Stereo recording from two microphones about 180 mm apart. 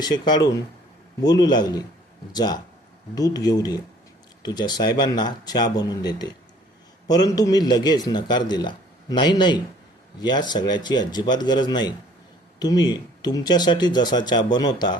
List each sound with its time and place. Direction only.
0.0 s a man's voice: 25° left (ahead or behind)